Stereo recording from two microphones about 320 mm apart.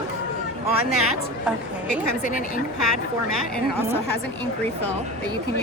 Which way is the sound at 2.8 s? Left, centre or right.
Left.